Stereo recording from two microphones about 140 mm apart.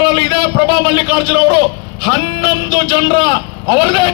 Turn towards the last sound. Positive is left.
turn(degrees=35)  # may be behind; listen again after turning